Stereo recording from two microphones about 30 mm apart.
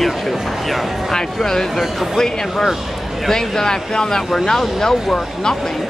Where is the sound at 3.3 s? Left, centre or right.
Left.